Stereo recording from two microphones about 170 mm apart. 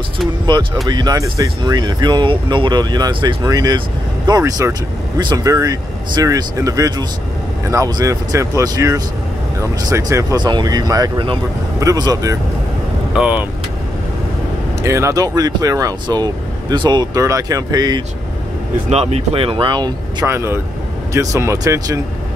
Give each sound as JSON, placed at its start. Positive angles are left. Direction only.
{"t": 0.8, "sound": "speech", "side_deg": -25}
{"t": 13.1, "sound": "speech", "side_deg": -10}
{"t": 14.8, "sound": "speech", "side_deg": -15}
{"t": 18.9, "sound": "speech", "side_deg": -40}
{"t": 20.2, "sound": "speech", "side_deg": -15}